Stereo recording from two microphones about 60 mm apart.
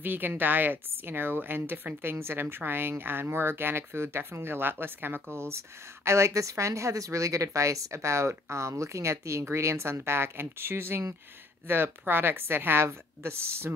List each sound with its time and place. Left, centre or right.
0.0 s speech: right